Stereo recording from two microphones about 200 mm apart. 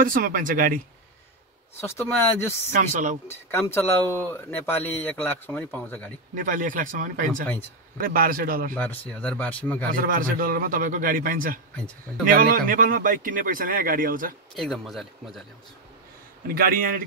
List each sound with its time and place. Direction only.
0.0 s a man's voice: 45° right (ahead or behind)
1.8 s speech: 10° left (ahead or behind)
2.7 s speech: 40° right (ahead or behind)
3.3 s speech: 10° left (ahead or behind)
6.3 s a man's voice: 40° right (ahead or behind)
8.7 s speech: 10° left (ahead or behind)
9.8 s a man's voice: 45° right (ahead or behind)
14.5 s a man's voice: centre (ahead or behind)
16.4 s a man's voice: 45° right (ahead or behind)